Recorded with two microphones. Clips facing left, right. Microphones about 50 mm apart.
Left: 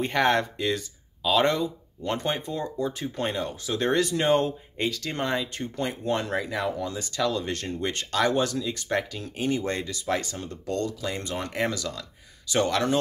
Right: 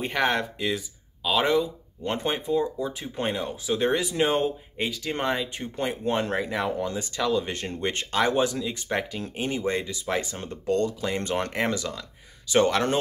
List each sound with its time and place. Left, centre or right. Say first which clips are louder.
0.0 s speech: left 2 dB; centre
6.0 s speech: right 1 dB; right
10.3 s speech: right 4 dB; right
11.5 s speech: right 1 dB; right